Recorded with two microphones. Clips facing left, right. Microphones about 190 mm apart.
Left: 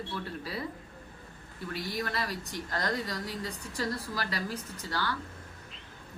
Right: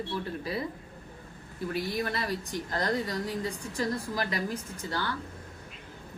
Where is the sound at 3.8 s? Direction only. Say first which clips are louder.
Right 3 dB; 20° right (ahead or behind).